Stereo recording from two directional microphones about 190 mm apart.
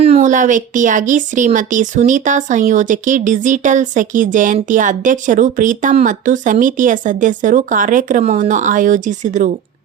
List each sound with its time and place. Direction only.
0.0 s speech: 35° right (ahead or behind)